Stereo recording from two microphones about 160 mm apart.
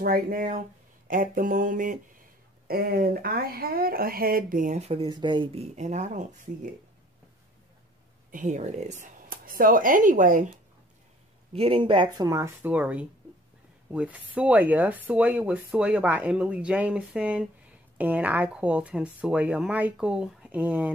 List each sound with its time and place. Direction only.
0.0 s speech: 65° right (ahead or behind)
2.7 s speech: 70° right (ahead or behind)
4.7 s speech: 40° right (ahead or behind)
8.3 s speech: 55° right (ahead or behind)
11.5 s speech: 35° right (ahead or behind); by 20.9 s 10° right (ahead or behind)